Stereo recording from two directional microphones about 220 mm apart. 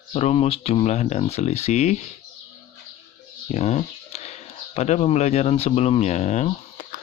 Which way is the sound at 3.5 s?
30° left (ahead or behind).